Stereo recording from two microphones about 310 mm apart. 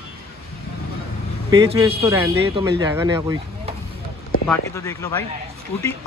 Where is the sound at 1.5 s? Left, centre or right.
Centre.